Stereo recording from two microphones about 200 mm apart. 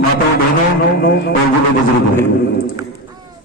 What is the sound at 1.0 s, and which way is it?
Speech, 55° left (ahead or behind).